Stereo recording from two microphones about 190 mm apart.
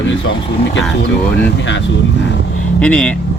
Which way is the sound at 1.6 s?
70° left (ahead or behind).